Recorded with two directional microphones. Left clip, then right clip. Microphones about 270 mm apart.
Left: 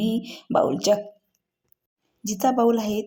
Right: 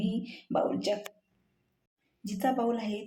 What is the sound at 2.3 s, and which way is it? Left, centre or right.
Speech, left.